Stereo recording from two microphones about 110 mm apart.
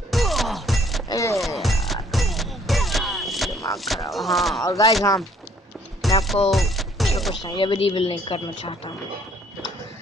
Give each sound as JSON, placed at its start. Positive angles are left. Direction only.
{"t": 0.1, "sound": "music", "side_deg": 0}
{"t": 1.0, "sound": "music", "side_deg": 30}
{"t": 1.3, "sound": "music", "side_deg": 0}
{"t": 3.7, "sound": "speech", "side_deg": 0}
{"t": 4.6, "sound": "speech", "side_deg": 30}
{"t": 6.0, "sound": "music", "side_deg": 0}
{"t": 7.4, "sound": "a woman's voice", "side_deg": 50}